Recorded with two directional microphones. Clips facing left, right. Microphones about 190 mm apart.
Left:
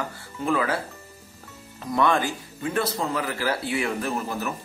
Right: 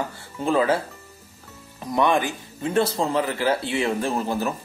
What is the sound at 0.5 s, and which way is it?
Speech, 25° right (ahead or behind).